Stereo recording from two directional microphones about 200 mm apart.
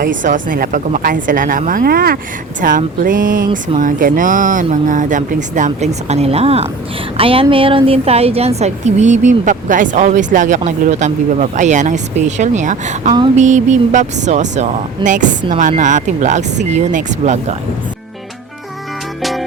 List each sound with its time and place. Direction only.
0.0 s a woman's voice: 40° right (ahead or behind)
19.2 s music: centre (ahead or behind)